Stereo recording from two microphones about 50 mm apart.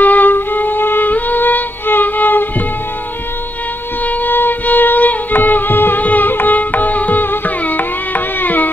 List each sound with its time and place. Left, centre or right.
0.0 s music: left
4.0 s music: left